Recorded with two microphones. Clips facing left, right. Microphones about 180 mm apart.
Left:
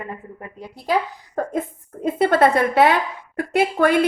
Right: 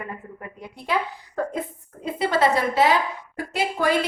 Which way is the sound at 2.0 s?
50° left (ahead or behind).